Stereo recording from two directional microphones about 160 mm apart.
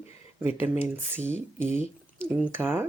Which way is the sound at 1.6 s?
15° right (ahead or behind).